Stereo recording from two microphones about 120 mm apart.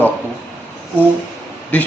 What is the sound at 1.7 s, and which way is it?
Speech, 15° left (ahead or behind).